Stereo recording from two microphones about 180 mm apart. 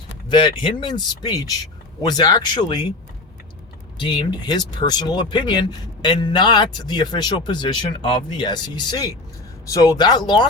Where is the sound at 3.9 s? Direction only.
25° left (ahead or behind).